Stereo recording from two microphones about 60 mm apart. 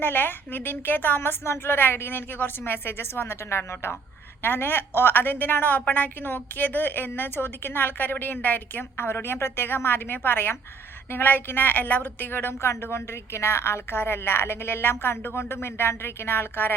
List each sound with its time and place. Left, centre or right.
0.0 s a woman's voice: left
12.6 s a woman's voice: left